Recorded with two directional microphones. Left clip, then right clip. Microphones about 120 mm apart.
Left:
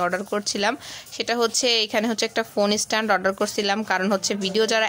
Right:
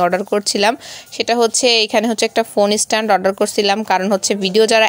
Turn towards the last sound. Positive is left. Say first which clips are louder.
# right 8 dB
turn(degrees=-40)  # may be behind; listen again after turning